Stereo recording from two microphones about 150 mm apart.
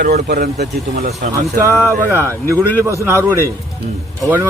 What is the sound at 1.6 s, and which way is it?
Speech, 20° right (ahead or behind).